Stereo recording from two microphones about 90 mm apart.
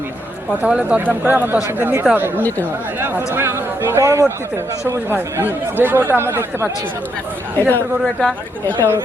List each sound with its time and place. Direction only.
0.6 s speech: 10° right (ahead or behind)
7.6 s speech: 20° left (ahead or behind)
8.0 s speech: 5° left (ahead or behind)